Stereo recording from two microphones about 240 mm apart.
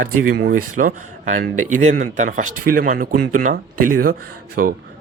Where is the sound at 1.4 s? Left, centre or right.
Right.